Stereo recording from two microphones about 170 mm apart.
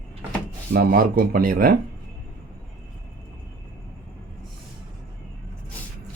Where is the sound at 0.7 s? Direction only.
60° right (ahead or behind).